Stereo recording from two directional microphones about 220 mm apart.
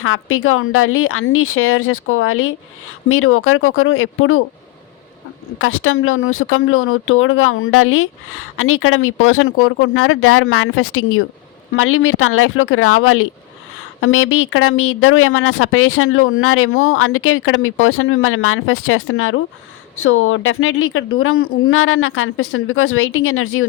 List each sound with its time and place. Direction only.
0.0 s speech: 70° left (ahead or behind)
5.5 s speech: 70° left (ahead or behind)